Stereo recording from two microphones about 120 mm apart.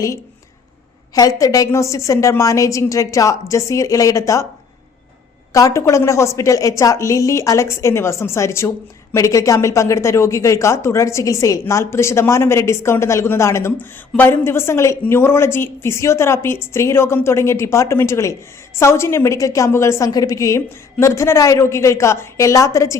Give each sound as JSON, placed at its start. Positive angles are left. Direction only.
{"t": 1.1, "sound": "a woman's voice", "side_deg": 30}
{"t": 5.5, "sound": "a woman's voice", "side_deg": 25}